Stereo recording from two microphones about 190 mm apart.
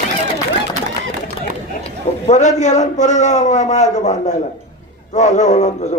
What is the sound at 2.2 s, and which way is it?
A man's voice, 40° left (ahead or behind).